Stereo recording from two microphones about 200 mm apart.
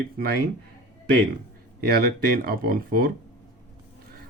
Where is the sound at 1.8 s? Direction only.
50° right (ahead or behind).